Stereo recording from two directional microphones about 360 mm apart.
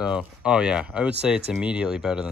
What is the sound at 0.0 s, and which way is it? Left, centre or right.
Speech, centre.